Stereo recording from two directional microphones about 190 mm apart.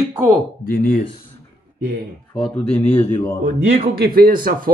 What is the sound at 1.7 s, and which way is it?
Speech, 65° right (ahead or behind).